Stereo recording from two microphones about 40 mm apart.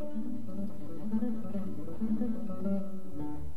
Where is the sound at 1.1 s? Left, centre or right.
Right.